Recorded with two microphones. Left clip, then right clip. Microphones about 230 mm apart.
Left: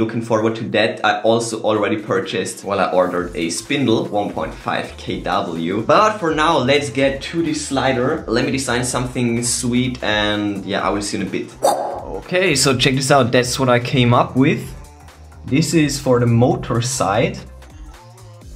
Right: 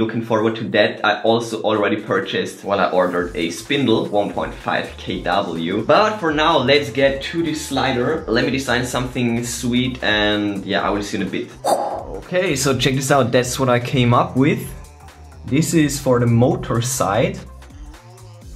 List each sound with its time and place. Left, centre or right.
0.0 s speech: centre
8.3 s speech: centre